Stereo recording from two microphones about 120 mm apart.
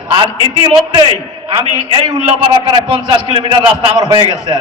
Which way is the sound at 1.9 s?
50° right (ahead or behind).